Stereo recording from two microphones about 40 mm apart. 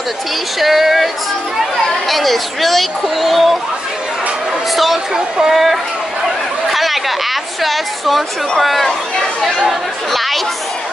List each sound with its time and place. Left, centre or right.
0.6 s speech: centre
4.7 s speech: centre
5.1 s speech: centre
6.7 s chatter: centre
7.6 s speech: centre